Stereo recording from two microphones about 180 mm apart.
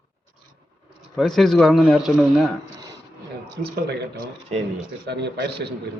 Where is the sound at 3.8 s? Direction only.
65° right (ahead or behind).